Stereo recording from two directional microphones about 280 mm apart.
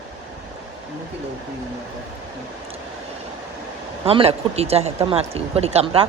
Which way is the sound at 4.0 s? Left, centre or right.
Centre.